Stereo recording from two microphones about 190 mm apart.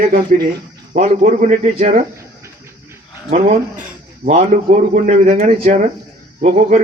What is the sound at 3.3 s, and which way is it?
Speech, 40° right (ahead or behind).